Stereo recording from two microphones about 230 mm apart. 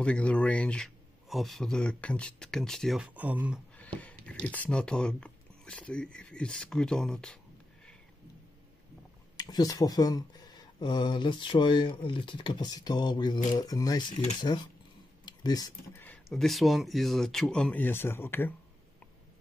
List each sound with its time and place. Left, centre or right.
0.0 s a man's voice: centre
3.7 s speech: centre
9.4 s a man's voice: centre